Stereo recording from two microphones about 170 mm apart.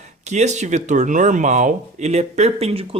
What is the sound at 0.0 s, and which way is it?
Speech, 40° right (ahead or behind).